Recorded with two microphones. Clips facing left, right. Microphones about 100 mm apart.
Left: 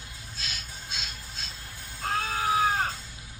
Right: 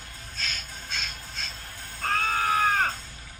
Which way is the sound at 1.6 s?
45° right (ahead or behind).